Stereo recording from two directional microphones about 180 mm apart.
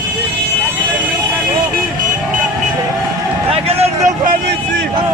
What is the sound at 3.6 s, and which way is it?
Vehicle, 35° right (ahead or behind).